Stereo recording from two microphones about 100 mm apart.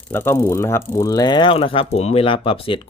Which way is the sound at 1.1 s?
45° left (ahead or behind).